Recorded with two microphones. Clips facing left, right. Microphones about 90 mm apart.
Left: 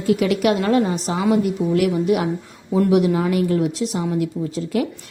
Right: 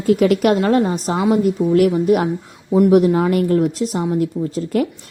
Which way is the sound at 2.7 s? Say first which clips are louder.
Right 4 dB; 20° right (ahead or behind).